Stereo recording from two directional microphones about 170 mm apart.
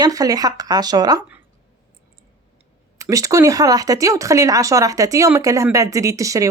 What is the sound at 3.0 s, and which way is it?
Speech, 20° right (ahead or behind).